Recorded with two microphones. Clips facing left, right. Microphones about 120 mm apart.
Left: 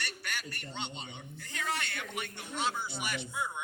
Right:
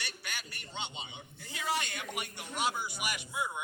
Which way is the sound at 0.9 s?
5° right (ahead or behind).